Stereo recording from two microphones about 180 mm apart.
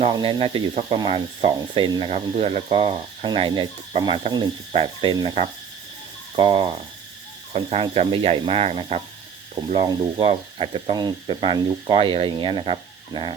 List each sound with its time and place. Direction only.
0.0 s speech: 25° right (ahead or behind)